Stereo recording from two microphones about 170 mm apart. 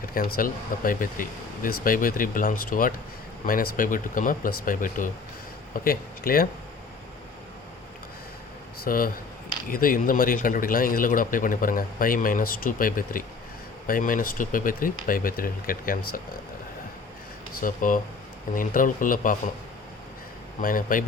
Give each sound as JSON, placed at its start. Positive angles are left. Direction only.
{"t": 0.0, "sound": "speech", "side_deg": 55}
{"t": 8.8, "sound": "speech", "side_deg": 55}
{"t": 17.5, "sound": "speech", "side_deg": 55}
{"t": 20.6, "sound": "speech", "side_deg": 55}